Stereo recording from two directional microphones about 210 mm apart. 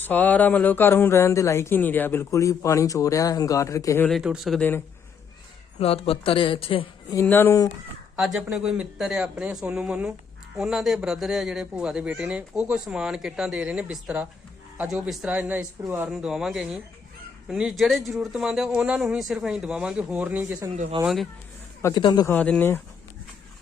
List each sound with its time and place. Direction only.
0.0 s speech: 10° left (ahead or behind)
4.2 s a man's voice: 5° right (ahead or behind)
5.8 s speech: 25° left (ahead or behind)
7.2 s speech: 10° left (ahead or behind)
8.2 s a man's voice: centre (ahead or behind)
21.8 s speech: 15° left (ahead or behind)
22.3 s speech: 5° left (ahead or behind)